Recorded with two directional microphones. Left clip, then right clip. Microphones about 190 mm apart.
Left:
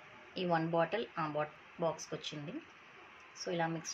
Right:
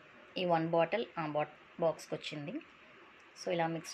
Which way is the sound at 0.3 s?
15° right (ahead or behind).